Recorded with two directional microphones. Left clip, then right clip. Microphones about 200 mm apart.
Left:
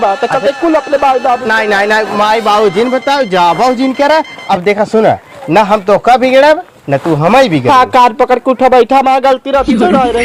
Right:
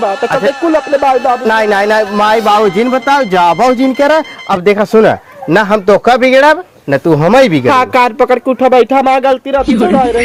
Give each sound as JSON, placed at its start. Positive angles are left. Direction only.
{"t": 0.8, "sound": "speech", "side_deg": 0}
{"t": 1.5, "sound": "a man's voice", "side_deg": -50}
{"t": 7.7, "sound": "speech", "side_deg": -20}